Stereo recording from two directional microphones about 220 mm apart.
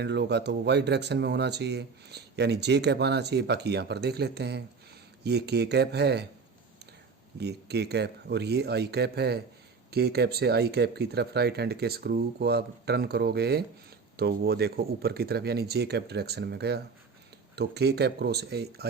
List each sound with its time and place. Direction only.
0.0 s speech: 50° right (ahead or behind)
7.3 s speech: 50° right (ahead or behind)